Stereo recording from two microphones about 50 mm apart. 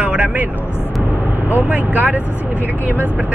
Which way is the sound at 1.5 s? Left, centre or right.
Right.